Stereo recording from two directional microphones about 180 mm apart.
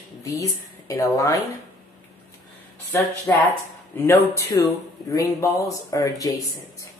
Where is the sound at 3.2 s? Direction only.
15° left (ahead or behind).